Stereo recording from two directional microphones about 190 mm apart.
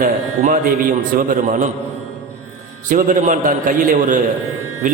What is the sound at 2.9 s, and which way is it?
A man's voice, 40° right (ahead or behind).